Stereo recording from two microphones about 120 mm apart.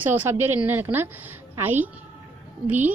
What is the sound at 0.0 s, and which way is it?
A woman's voice, 15° right (ahead or behind).